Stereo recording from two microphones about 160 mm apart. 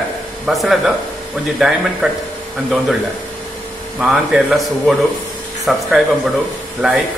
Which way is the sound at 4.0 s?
5° right (ahead or behind).